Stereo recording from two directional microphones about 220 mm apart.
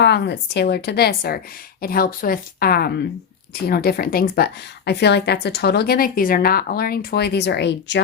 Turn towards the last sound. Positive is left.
turn(degrees=50)  # may be behind; listen again after turning